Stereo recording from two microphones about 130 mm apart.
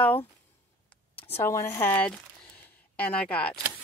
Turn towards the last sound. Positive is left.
turn(degrees=10)  # may be behind; listen again after turning